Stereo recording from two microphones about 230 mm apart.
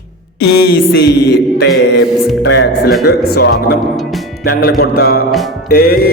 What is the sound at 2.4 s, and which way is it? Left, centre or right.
Speech, left.